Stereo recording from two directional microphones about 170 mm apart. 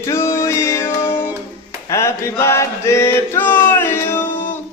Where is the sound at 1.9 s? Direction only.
15° left (ahead or behind).